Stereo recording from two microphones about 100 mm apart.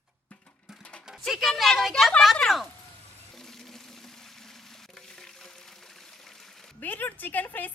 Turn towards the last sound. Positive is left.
turn(degrees=15)  # may be behind; listen again after turning